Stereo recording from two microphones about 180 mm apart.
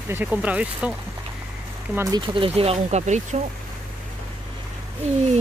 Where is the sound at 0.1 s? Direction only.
10° right (ahead or behind).